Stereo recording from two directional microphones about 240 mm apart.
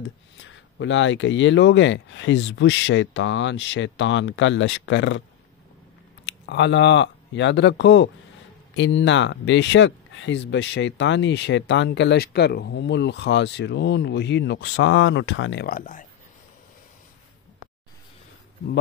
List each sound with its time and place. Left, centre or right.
0.4 s speech: left
6.2 s speech: left